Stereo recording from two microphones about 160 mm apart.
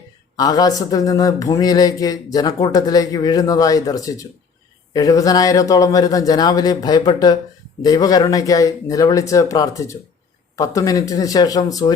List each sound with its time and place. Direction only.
0.3 s speech: 25° left (ahead or behind)